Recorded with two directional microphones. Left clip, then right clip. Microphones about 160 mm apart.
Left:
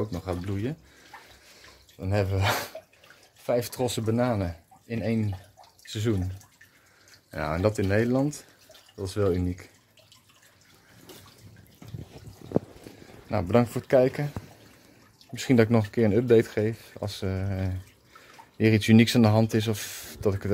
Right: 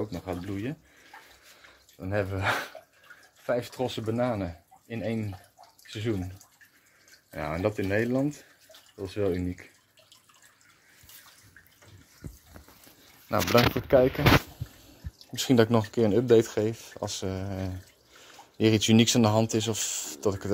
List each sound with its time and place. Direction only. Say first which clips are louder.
0.1 s speech: left 2 dB; 20° left (ahead or behind)
1.1 s bathtub: left 2 dB; 30° right (ahead or behind)
2.0 s speech: left 2 dB; 25° left (ahead or behind)
7.2 s speech: left 3 dB; 25° left (ahead or behind)
13.5 s speech: right 1 dB; 5° left (ahead or behind)
15.3 s speech: even; 10° left (ahead or behind)